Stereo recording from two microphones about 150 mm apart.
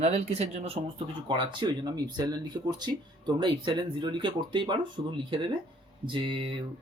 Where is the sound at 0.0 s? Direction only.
45° right (ahead or behind).